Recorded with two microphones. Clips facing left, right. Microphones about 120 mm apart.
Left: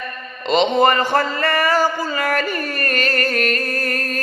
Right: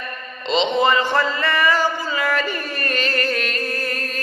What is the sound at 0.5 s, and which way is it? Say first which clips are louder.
Speech: left 3 dB; 50° left (ahead or behind).